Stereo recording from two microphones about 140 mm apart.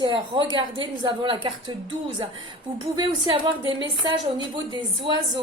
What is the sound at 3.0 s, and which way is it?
A woman's voice, 35° right (ahead or behind).